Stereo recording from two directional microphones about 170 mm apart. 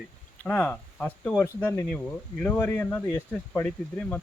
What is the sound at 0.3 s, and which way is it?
Speech, 10° left (ahead or behind).